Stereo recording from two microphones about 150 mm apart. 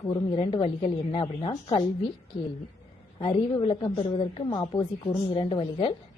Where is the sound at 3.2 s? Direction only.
30° left (ahead or behind).